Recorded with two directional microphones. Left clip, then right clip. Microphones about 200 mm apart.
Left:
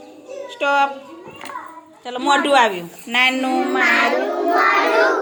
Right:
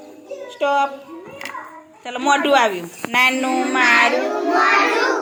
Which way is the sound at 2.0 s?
5° left (ahead or behind).